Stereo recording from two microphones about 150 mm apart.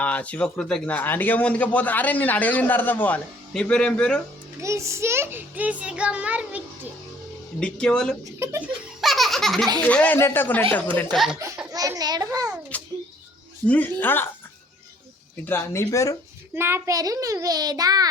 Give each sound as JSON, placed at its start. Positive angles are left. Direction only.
{"t": 0.0, "sound": "a man's voice", "side_deg": 10}
{"t": 4.6, "sound": "a child's voice", "side_deg": -20}
{"t": 7.6, "sound": "speech", "side_deg": 5}
{"t": 8.2, "sound": "a sound", "side_deg": -15}
{"t": 9.0, "sound": "baby laughter", "side_deg": 0}
{"t": 9.8, "sound": "a man's voice", "side_deg": 10}
{"t": 11.1, "sound": "speech", "side_deg": 0}
{"t": 11.7, "sound": "a child's voice", "side_deg": -25}
{"t": 12.7, "sound": "a sound", "side_deg": 10}
{"t": 13.7, "sound": "a man's voice", "side_deg": 10}
{"t": 15.4, "sound": "speech", "side_deg": 15}
{"t": 16.6, "sound": "a child's voice", "side_deg": -15}